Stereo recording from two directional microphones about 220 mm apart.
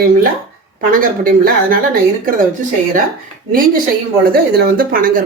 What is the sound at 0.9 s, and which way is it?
Speech, 40° right (ahead or behind).